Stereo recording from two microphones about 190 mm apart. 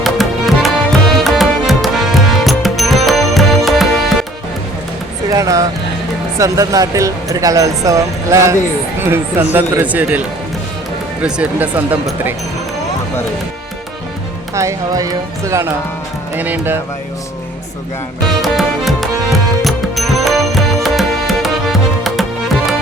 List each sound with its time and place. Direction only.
0.0 s music: centre (ahead or behind)
5.3 s speech: 15° right (ahead or behind)
11.2 s speech: 5° right (ahead or behind)
14.5 s speech: 15° right (ahead or behind)
18.4 s music: centre (ahead or behind)